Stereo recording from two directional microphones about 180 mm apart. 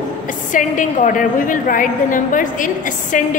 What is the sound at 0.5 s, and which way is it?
A woman's voice, 45° left (ahead or behind).